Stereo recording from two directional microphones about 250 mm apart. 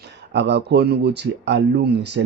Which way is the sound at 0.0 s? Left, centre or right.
Right.